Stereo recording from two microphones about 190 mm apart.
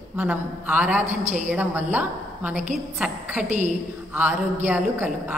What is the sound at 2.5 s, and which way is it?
Speech, 40° right (ahead or behind).